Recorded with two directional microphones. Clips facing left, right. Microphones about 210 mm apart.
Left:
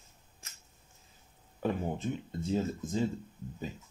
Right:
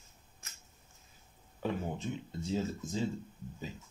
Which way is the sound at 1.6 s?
50° left (ahead or behind).